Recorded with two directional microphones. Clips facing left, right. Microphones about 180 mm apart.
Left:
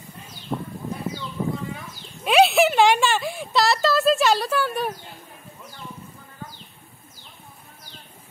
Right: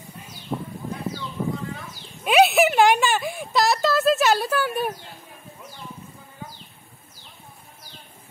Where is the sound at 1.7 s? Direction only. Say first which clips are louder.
Even; centre (ahead or behind).